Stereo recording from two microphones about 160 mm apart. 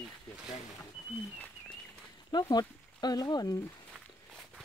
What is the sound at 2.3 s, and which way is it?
Speech, 25° left (ahead or behind).